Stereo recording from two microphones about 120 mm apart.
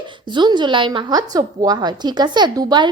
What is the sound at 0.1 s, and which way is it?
A woman's voice, 40° right (ahead or behind).